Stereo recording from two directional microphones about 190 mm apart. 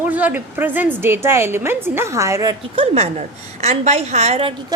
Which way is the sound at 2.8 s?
35° right (ahead or behind).